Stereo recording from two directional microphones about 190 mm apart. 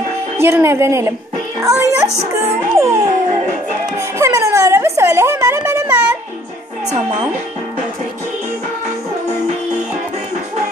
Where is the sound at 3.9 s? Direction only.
15° right (ahead or behind).